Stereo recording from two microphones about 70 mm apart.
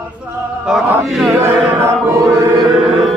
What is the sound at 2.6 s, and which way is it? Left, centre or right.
Music, centre.